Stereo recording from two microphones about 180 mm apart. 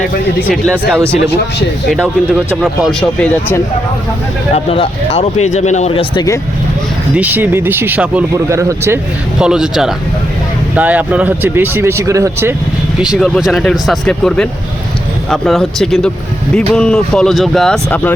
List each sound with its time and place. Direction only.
0.4 s speech: centre (ahead or behind)
1.9 s speech: centre (ahead or behind)
4.5 s speech: 35° left (ahead or behind)
7.2 s speech: 10° right (ahead or behind)
9.4 s speech: 5° right (ahead or behind)
13.0 s speech: centre (ahead or behind)